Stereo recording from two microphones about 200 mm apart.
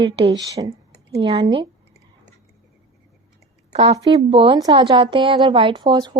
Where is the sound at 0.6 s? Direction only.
30° right (ahead or behind).